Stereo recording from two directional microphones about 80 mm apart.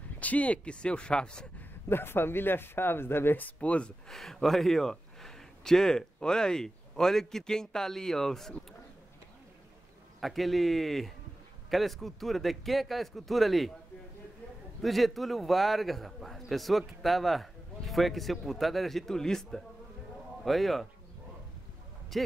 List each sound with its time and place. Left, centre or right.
0.2 s speech: centre
1.6 s speech: left
4.1 s speech: centre
10.2 s a man's voice: centre
14.8 s a man's voice: centre
22.1 s a man's voice: centre